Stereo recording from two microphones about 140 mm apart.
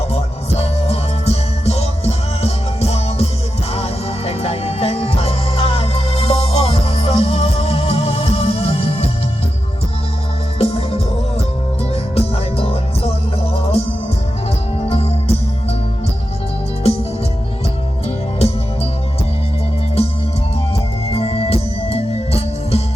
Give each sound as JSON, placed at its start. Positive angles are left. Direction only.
{"t": 0.1, "sound": "music", "side_deg": 45}
{"t": 4.3, "sound": "music", "side_deg": 45}
{"t": 10.6, "sound": "music", "side_deg": 45}
{"t": 12.1, "sound": "music", "side_deg": 45}
{"t": 14.8, "sound": "music", "side_deg": 45}
{"t": 16.8, "sound": "music", "side_deg": 45}
{"t": 21.1, "sound": "music", "side_deg": 45}